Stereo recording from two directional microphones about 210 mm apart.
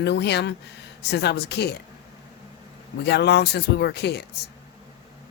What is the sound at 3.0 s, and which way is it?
Speech, 55° left (ahead or behind).